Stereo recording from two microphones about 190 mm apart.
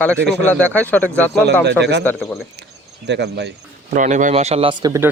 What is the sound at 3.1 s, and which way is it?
Speech, 60° right (ahead or behind).